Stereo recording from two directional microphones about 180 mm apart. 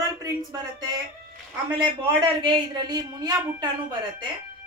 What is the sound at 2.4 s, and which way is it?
A woman's voice, 25° right (ahead or behind).